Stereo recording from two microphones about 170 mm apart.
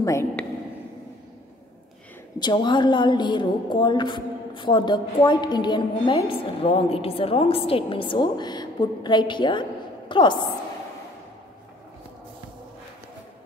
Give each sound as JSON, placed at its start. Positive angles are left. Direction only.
{"t": 0.0, "sound": "a woman's voice", "side_deg": 20}
{"t": 2.3, "sound": "a woman's voice", "side_deg": 25}